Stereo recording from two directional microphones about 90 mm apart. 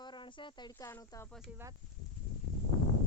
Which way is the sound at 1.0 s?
40° left (ahead or behind).